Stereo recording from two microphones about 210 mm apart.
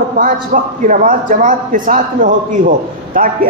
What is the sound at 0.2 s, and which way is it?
A man's voice, 40° right (ahead or behind).